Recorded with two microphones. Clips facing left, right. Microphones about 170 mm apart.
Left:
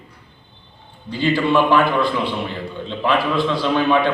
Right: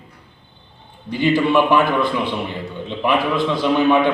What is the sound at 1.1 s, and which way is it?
A man's voice, 15° right (ahead or behind).